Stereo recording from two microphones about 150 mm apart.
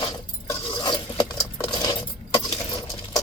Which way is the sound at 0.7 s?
30° left (ahead or behind).